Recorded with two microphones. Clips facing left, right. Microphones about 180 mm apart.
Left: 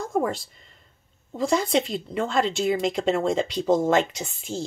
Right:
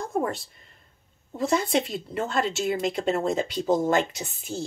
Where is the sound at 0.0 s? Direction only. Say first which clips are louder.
Left 2 dB; centre (ahead or behind).